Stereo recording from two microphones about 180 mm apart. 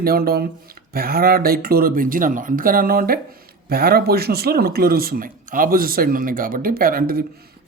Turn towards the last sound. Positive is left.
turn(degrees=-55)  # may be behind; listen again after turning